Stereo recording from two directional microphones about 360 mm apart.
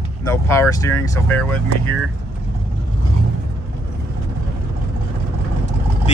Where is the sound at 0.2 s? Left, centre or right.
Centre.